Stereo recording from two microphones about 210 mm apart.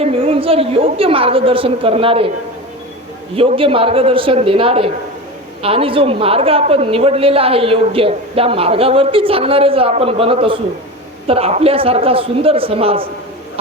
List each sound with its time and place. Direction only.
0.0 s a woman's voice: 25° right (ahead or behind)
3.3 s a woman's voice: 25° right (ahead or behind)